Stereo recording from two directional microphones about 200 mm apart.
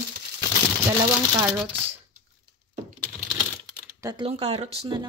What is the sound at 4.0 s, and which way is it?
Speech, 20° right (ahead or behind).